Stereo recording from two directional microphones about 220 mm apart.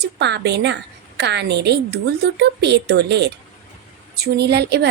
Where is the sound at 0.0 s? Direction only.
50° right (ahead or behind).